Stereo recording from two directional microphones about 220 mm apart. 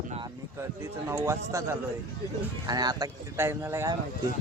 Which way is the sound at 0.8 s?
10° right (ahead or behind).